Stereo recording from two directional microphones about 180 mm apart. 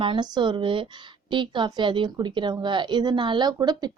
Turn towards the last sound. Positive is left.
turn(degrees=-25)  # may be behind; listen again after turning